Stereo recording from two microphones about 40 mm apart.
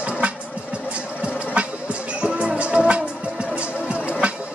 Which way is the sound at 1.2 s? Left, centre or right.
Right.